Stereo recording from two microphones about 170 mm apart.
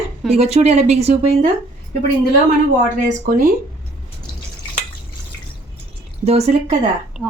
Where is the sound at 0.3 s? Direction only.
40° right (ahead or behind).